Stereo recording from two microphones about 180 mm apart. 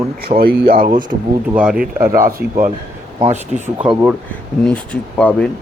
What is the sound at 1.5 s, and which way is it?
Speech, 5° right (ahead or behind).